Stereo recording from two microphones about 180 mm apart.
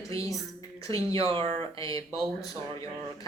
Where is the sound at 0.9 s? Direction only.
30° right (ahead or behind).